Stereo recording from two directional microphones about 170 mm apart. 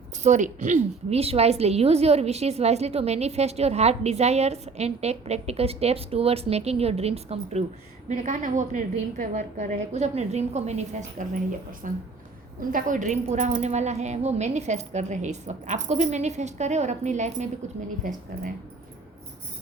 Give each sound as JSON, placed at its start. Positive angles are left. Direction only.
{"t": 0.2, "sound": "a woman's voice", "side_deg": -45}